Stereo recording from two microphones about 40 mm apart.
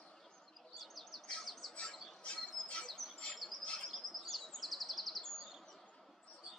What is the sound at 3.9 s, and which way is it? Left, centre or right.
Chirp, centre.